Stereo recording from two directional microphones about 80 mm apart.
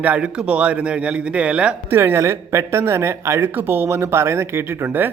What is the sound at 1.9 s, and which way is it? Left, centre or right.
Speech, right.